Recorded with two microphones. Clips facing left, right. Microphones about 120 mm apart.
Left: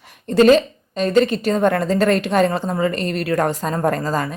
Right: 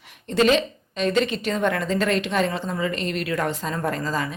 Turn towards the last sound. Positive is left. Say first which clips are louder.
# left 6 dB
turn(degrees=45)  # may be behind; listen again after turning